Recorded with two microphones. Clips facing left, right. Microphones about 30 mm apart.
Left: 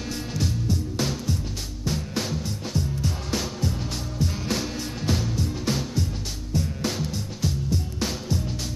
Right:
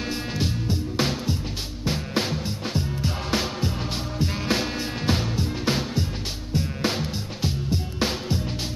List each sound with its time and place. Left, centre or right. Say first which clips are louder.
0.1 s music: left 1 dB; right